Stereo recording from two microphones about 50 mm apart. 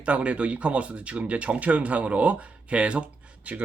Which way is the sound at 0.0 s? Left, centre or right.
Right.